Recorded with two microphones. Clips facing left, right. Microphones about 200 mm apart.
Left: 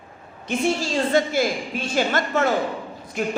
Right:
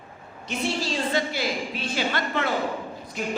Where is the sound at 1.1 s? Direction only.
45° left (ahead or behind).